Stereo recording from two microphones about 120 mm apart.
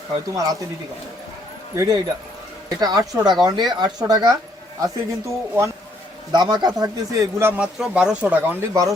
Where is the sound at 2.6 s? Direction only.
30° right (ahead or behind).